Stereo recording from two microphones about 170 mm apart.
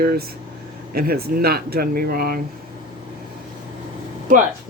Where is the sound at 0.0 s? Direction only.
60° right (ahead or behind).